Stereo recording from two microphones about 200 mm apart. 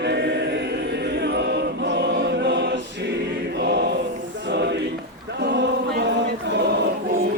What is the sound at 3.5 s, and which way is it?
Mantra, 60° right (ahead or behind).